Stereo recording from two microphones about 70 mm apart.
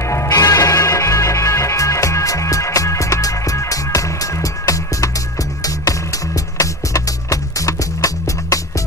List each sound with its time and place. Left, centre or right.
0.0 s music: left
0.3 s music: left